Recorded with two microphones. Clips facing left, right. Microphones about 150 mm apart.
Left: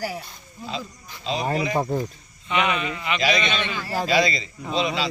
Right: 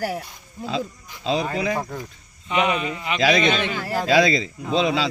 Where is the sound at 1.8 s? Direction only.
30° left (ahead or behind).